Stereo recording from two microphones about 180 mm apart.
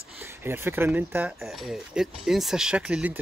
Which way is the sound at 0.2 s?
15° right (ahead or behind).